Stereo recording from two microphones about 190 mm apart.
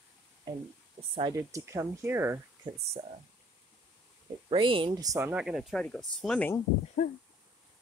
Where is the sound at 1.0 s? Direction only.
30° right (ahead or behind).